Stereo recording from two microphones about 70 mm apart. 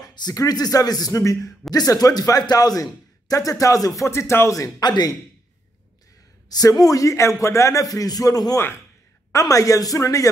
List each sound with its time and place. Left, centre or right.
0.0 s speech: left
1.7 s speech: left
4.7 s speech: left
6.8 s speech: left